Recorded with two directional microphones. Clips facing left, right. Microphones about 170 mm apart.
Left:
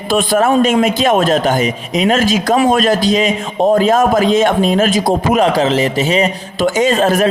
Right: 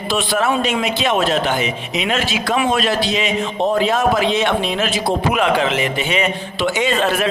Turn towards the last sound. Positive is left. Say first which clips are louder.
# left 6 dB
turn(degrees=45)  # may be behind; listen again after turning